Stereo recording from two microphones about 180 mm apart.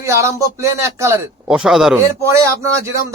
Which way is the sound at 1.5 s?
5° right (ahead or behind).